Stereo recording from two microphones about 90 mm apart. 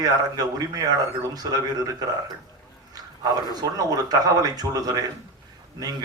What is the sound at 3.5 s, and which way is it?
A man's voice, 45° right (ahead or behind).